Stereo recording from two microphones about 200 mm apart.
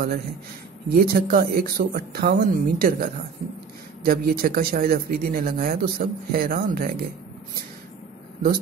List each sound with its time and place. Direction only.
0.8 s speech: 45° right (ahead or behind)